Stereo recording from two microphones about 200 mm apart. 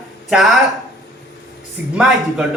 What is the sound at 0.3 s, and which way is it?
Speech, centre (ahead or behind).